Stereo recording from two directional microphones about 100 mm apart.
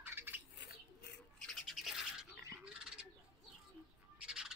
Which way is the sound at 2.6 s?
10° right (ahead or behind).